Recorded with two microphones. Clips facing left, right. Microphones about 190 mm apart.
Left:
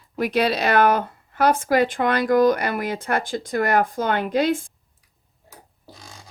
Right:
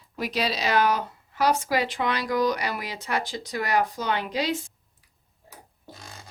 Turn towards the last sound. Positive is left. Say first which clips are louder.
# even
turn(degrees=0)  # may be behind; listen again after turning